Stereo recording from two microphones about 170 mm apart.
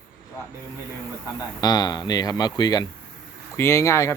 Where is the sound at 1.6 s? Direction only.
25° left (ahead or behind).